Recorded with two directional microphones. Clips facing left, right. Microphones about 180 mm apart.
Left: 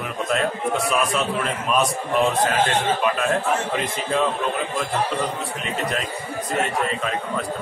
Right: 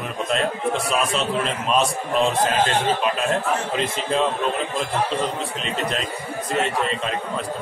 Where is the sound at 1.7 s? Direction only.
25° right (ahead or behind).